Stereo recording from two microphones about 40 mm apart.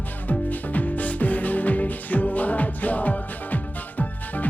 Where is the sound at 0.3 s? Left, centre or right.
Left.